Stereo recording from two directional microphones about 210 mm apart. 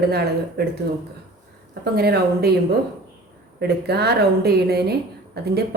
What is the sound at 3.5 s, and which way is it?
A woman's voice, 50° right (ahead or behind).